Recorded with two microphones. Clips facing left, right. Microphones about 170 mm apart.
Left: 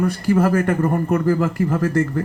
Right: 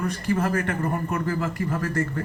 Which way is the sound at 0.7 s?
45° left (ahead or behind).